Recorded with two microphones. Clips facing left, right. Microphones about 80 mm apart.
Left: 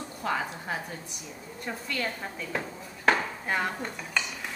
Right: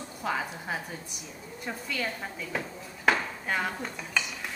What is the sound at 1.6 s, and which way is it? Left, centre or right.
Speech, centre.